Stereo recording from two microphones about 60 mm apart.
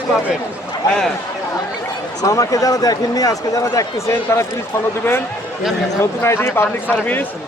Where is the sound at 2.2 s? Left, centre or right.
Left.